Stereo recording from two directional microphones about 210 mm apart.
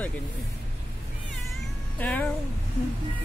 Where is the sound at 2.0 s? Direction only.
10° left (ahead or behind).